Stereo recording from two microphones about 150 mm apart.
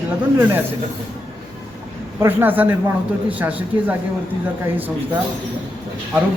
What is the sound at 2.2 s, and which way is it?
Speech, 10° right (ahead or behind).